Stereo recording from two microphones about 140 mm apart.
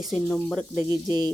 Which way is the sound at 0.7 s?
20° right (ahead or behind).